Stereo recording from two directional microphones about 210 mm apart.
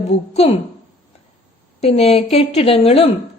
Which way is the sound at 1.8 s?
30° left (ahead or behind).